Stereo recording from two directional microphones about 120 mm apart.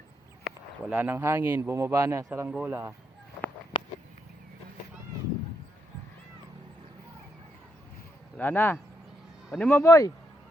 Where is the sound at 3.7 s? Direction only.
40° left (ahead or behind).